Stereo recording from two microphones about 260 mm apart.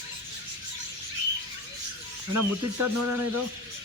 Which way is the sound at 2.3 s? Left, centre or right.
Right.